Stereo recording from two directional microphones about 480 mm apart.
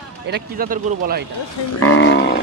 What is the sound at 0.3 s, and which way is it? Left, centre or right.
Speech, centre.